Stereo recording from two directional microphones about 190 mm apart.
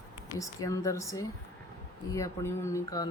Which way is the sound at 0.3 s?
20° left (ahead or behind).